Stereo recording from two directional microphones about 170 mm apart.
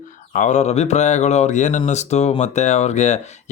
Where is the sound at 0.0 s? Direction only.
50° left (ahead or behind).